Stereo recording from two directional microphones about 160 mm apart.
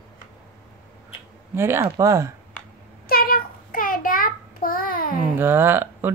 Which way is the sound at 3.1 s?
65° left (ahead or behind).